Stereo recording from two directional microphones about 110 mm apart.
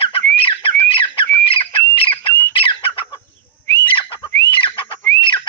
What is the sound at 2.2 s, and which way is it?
Bird, 20° left (ahead or behind).